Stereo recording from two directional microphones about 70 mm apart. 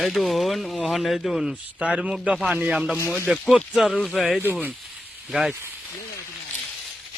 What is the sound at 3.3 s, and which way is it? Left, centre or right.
Speech, centre.